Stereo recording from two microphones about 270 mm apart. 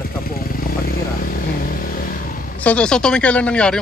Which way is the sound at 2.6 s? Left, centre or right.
Centre.